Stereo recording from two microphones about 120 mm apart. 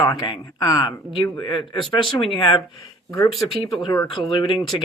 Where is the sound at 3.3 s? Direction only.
Centre (ahead or behind).